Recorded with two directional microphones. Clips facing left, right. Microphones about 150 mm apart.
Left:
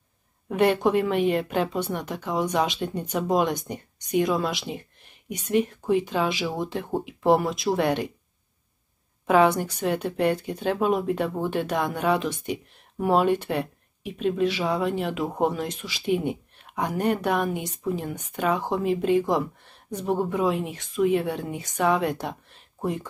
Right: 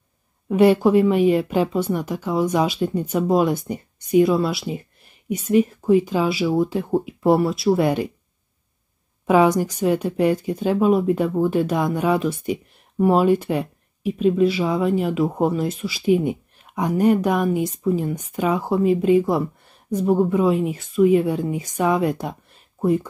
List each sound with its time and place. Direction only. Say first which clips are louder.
0.5 s speech: right 6 dB; 10° right (ahead or behind)
9.2 s a woman's voice: right 3 dB; 10° right (ahead or behind)